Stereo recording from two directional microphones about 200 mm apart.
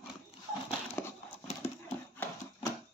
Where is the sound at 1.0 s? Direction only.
10° left (ahead or behind).